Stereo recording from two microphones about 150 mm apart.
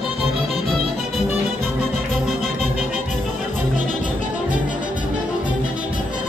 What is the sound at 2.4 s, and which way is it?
Music, 50° left (ahead or behind).